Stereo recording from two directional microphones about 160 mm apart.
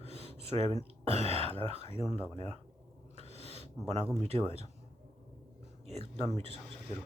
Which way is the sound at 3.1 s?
40° right (ahead or behind).